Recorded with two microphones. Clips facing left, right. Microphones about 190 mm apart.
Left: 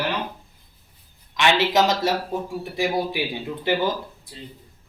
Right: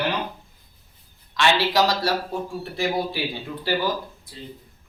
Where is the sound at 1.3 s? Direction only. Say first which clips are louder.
Left 1 dB; 20° left (ahead or behind).